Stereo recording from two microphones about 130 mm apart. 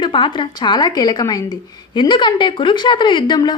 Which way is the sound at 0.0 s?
40° left (ahead or behind).